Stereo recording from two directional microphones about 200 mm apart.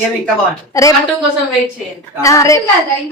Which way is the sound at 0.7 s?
15° left (ahead or behind).